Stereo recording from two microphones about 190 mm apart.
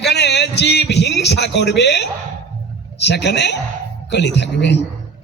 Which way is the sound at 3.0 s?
60° left (ahead or behind).